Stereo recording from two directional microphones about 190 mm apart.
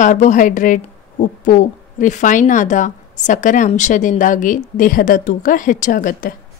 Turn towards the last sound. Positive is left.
turn(degrees=45)  # may be behind; listen again after turning